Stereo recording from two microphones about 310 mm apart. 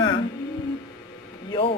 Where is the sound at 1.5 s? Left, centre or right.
Centre.